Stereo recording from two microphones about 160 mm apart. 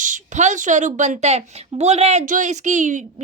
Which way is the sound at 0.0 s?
50° right (ahead or behind).